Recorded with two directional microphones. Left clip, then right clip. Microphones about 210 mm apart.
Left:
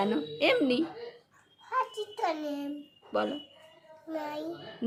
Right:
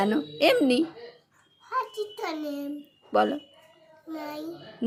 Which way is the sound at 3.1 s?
30° right (ahead or behind).